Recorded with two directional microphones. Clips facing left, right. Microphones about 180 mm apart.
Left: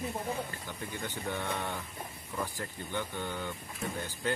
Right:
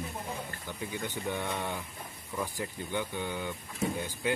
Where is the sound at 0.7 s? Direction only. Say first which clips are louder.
Right 2 dB; 15° right (ahead or behind).